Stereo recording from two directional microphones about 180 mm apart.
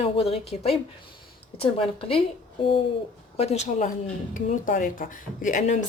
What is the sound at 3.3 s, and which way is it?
A woman's voice, 35° left (ahead or behind).